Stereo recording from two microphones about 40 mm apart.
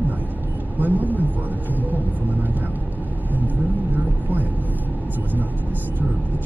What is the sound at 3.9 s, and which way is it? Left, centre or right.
Vehicle, right.